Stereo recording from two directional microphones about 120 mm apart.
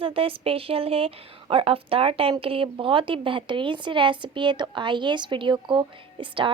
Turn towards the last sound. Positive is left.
turn(degrees=-45)  # may be behind; listen again after turning